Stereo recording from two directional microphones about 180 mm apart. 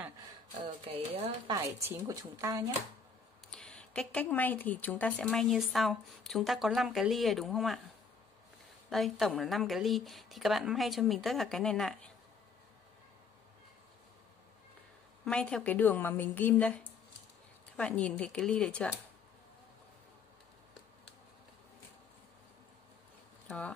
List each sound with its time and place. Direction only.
0.8 s speech: 30° right (ahead or behind)
1.8 s speech: 15° right (ahead or behind)
3.5 s speech: 5° left (ahead or behind)
8.9 s speech: centre (ahead or behind)
15.2 s a woman's voice: 5° left (ahead or behind)